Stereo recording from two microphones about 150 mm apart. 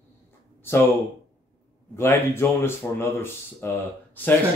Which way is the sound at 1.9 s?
15° left (ahead or behind).